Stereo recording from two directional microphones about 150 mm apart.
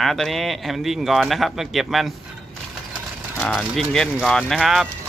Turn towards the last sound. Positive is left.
turn(degrees=0)  # may be behind; listen again after turning